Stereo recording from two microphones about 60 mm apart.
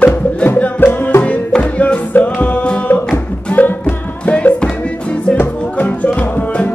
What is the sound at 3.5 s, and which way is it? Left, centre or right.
Music, left.